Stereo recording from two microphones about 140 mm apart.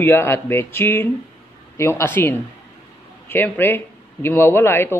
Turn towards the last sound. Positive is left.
turn(degrees=15)  # may be behind; listen again after turning